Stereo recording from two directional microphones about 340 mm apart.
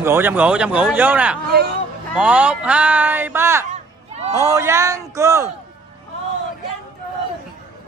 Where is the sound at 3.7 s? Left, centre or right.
Centre.